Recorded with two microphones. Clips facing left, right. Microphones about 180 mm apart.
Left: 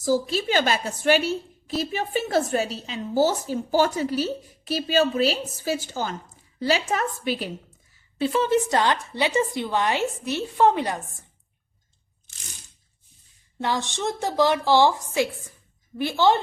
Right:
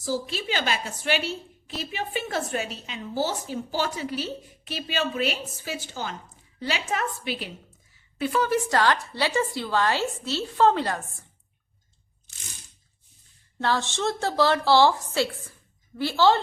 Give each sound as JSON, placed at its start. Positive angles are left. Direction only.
{"t": 0.0, "sound": "a woman's voice", "side_deg": 40}
{"t": 8.2, "sound": "a woman's voice", "side_deg": 25}
{"t": 13.6, "sound": "a woman's voice", "side_deg": 15}